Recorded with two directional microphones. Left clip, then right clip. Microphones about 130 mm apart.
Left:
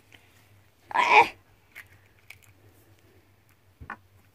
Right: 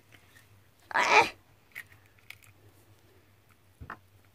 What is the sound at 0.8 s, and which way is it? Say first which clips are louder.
Dog: left 4 dB; 25° right (ahead or behind).